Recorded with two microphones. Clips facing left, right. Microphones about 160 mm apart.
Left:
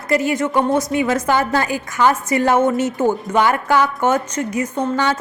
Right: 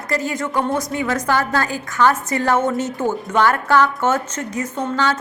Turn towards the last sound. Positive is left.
turn(degrees=15)  # may be behind; listen again after turning